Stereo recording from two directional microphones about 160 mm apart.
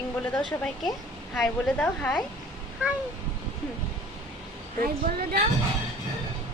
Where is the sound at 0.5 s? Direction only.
20° left (ahead or behind).